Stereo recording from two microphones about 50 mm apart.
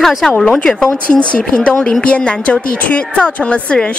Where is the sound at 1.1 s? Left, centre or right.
Centre.